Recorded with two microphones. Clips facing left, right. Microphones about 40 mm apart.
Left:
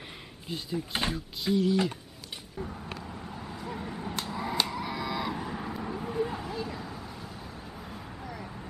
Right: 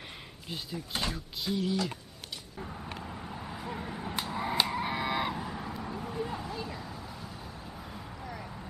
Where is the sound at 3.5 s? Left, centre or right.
Centre.